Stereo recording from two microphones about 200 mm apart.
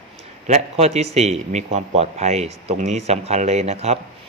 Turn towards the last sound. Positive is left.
turn(degrees=-30)  # may be behind; listen again after turning